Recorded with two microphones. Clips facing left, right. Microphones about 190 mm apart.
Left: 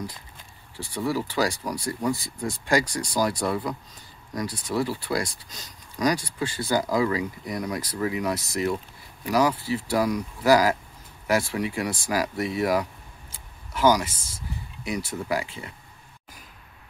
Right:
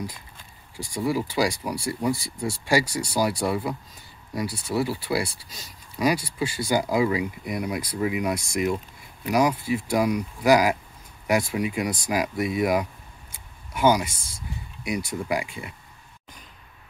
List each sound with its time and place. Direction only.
0.7 s speech: 10° right (ahead or behind)